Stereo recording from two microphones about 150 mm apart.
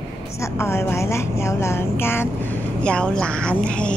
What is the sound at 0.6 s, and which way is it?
A woman's voice, 15° left (ahead or behind).